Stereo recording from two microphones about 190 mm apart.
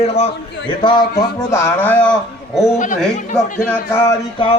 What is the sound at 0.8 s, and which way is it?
A man's voice, 25° left (ahead or behind).